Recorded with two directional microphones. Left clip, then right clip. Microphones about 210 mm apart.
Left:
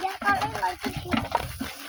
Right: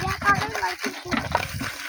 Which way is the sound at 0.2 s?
55° left (ahead or behind).